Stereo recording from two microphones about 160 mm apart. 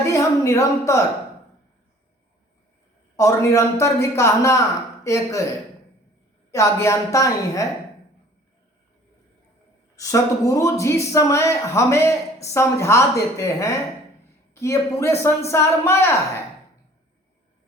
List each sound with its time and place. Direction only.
0.0 s speech: 20° left (ahead or behind)
3.2 s speech: 20° left (ahead or behind)
6.5 s speech: 20° left (ahead or behind)
9.9 s speech: 20° left (ahead or behind)